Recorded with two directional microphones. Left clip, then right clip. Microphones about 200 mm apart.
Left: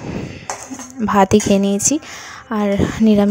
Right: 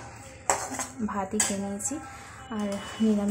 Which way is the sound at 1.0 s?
45° left (ahead or behind).